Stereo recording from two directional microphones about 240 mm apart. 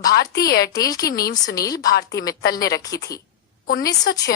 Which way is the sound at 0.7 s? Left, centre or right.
Centre.